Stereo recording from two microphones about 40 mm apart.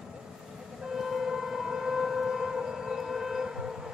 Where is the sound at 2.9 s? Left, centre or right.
Centre.